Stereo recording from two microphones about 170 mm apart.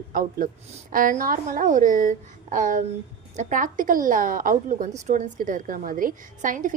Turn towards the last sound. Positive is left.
turn(degrees=-50)  # may be behind; listen again after turning